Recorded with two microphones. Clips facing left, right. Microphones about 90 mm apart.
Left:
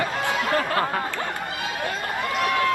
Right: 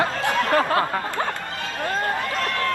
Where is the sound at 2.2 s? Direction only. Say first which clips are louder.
Left 2 dB; 15° left (ahead or behind).